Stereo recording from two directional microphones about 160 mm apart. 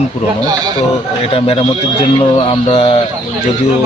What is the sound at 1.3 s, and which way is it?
Speech, 40° left (ahead or behind).